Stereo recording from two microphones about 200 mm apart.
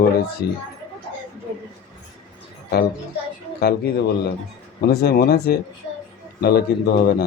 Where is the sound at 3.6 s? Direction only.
50° left (ahead or behind).